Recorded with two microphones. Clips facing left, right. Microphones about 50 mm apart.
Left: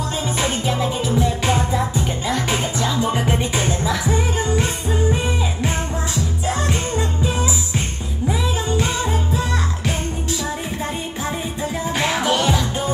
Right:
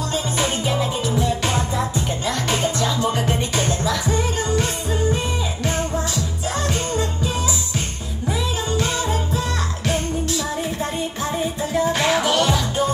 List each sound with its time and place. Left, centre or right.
0.1 s music: centre
6.4 s music: left; by 12.6 s centre